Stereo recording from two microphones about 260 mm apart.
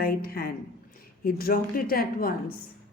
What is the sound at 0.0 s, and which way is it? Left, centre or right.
A woman's voice, left.